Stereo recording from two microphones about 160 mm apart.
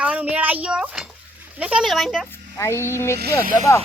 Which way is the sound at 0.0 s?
10° right (ahead or behind).